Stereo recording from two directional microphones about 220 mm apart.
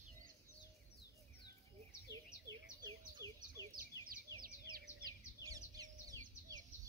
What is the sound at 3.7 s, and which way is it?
Bird, 40° right (ahead or behind).